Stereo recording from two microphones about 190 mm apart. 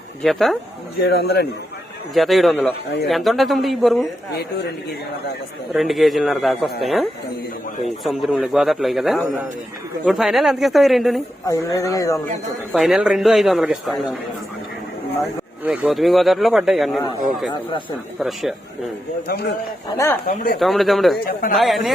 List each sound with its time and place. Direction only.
0.2 s speech: centre (ahead or behind)
1.0 s speech: 60° left (ahead or behind)
2.1 s speech: centre (ahead or behind)
4.4 s speech: 60° left (ahead or behind)
5.7 s speech: centre (ahead or behind)
11.4 s speech: 15° left (ahead or behind)
12.7 s speech: centre (ahead or behind)
15.2 s speech: 5° right (ahead or behind)
18.2 s speech: centre (ahead or behind)
19.3 s speech: 55° left (ahead or behind)
20.6 s speech: centre (ahead or behind)